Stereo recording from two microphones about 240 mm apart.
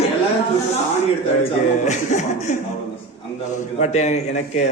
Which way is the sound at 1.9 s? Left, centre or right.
Left.